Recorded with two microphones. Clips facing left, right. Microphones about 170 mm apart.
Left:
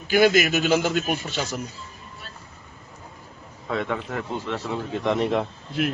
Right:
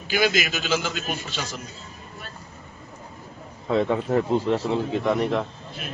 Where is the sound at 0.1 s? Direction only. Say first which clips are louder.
Left 5 dB; 50° left (ahead or behind).